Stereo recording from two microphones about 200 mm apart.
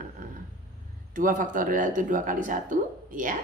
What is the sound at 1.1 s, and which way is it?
A woman's voice, 40° right (ahead or behind).